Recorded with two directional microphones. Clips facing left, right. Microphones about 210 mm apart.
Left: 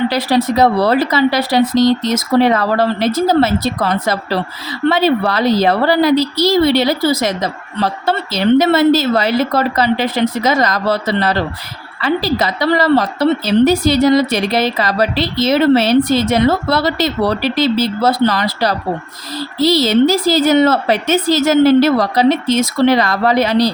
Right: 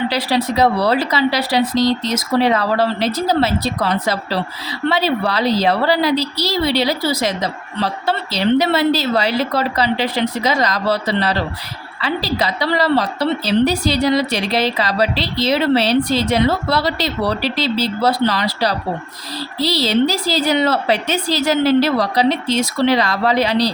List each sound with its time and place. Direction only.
0.1 s a woman's voice: 50° left (ahead or behind)